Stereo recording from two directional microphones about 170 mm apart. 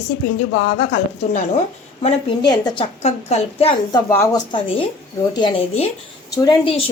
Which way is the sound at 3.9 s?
20° left (ahead or behind).